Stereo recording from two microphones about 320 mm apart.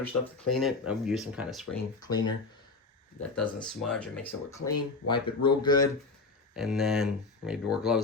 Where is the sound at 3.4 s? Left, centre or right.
Centre.